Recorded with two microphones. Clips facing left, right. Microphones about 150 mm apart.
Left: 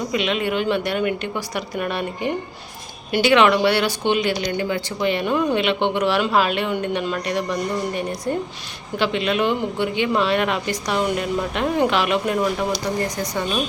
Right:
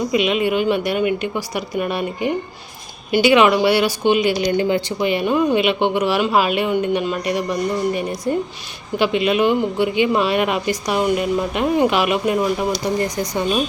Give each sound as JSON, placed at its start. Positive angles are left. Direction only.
{"t": 0.1, "sound": "speech", "side_deg": -10}
{"t": 4.4, "sound": "speech", "side_deg": -25}
{"t": 4.9, "sound": "speech", "side_deg": -10}